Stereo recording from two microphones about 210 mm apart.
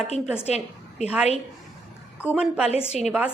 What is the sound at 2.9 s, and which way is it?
Speech, 30° left (ahead or behind).